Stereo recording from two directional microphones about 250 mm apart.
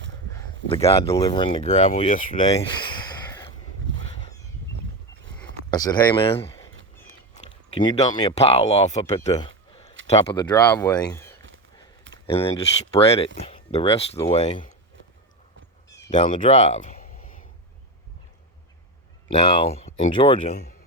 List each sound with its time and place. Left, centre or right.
0.7 s speech: left
3.2 s a sound: centre
3.9 s a sound: right
5.7 s speech: centre
7.7 s speech: centre
12.5 s speech: left
15.9 s speech: centre
19.4 s speech: centre